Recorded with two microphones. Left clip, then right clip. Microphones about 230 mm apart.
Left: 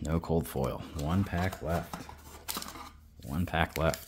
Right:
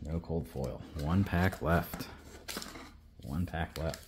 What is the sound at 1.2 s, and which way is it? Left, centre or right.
Speech, centre.